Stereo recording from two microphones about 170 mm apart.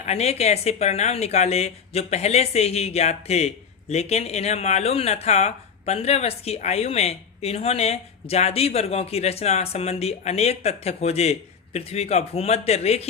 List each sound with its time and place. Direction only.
0.0 s speech: 40° left (ahead or behind)